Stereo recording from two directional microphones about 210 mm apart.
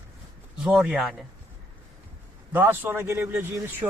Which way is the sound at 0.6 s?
Centre (ahead or behind).